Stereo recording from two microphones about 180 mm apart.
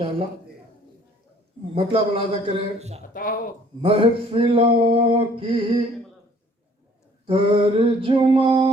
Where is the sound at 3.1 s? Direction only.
50° left (ahead or behind).